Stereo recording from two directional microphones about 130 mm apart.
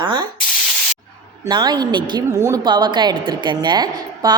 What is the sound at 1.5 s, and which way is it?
Speech, 35° right (ahead or behind).